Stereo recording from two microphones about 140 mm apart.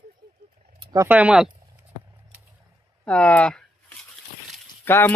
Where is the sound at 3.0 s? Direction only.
10° left (ahead or behind).